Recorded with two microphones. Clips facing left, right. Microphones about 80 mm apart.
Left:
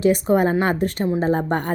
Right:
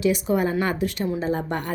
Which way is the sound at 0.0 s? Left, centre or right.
Left.